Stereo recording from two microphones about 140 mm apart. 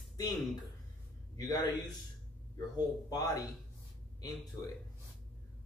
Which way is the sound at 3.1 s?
25° left (ahead or behind).